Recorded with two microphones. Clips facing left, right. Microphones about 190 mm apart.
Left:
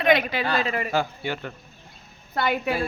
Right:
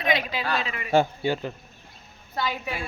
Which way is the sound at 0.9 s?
25° right (ahead or behind).